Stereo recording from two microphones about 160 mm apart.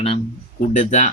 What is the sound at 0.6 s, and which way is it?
Speech, 50° left (ahead or behind).